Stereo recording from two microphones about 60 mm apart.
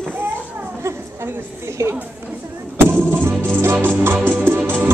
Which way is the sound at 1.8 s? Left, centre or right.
Right.